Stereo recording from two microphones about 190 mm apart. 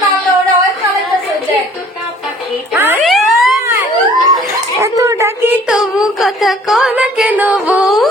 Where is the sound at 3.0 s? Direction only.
Centre (ahead or behind).